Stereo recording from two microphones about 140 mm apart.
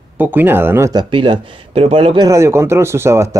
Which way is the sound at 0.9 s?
35° right (ahead or behind).